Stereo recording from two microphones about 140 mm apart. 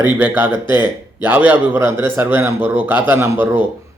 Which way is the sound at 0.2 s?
10° right (ahead or behind).